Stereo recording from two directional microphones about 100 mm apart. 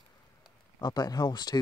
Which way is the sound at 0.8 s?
40° left (ahead or behind).